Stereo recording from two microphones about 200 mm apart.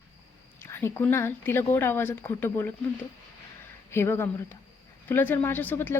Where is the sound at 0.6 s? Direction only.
15° left (ahead or behind).